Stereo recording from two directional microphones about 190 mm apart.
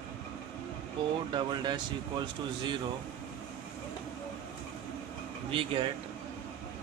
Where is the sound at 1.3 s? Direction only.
25° right (ahead or behind).